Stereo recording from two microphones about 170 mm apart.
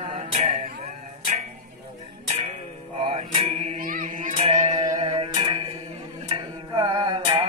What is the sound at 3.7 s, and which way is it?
Music, 55° right (ahead or behind).